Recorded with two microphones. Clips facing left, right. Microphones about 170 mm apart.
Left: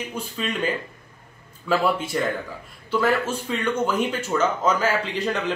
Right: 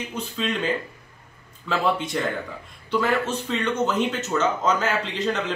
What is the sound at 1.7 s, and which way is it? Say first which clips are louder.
Speech: left 2 dB; 5° left (ahead or behind).